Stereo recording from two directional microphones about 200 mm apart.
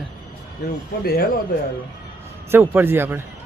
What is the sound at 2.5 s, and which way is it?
Speech, 10° right (ahead or behind).